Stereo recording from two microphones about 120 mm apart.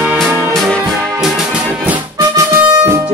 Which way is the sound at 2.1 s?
20° right (ahead or behind).